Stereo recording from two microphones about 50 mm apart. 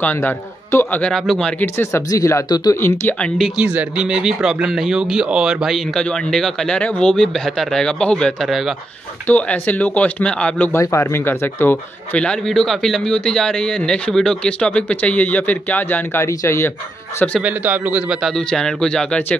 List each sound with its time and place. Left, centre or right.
0.7 s speech: left
1.1 s a man's voice: centre
1.8 s speech: left
4.0 s speech: centre
5.9 s a man's voice: centre
9.3 s speech: left
10.8 s speech: left
11.2 s speech: left
12.4 s a man's voice: centre
14.6 s speech: left
16.2 s speech: left
17.4 s speech: right
18.5 s a man's voice: centre